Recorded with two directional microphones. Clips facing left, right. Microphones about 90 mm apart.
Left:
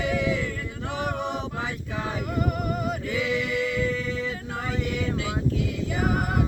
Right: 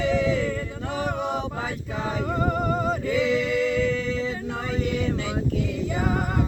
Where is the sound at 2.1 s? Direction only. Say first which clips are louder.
Right 4 dB; 30° right (ahead or behind).